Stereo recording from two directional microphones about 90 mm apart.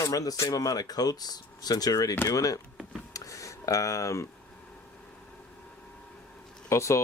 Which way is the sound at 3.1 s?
35° left (ahead or behind).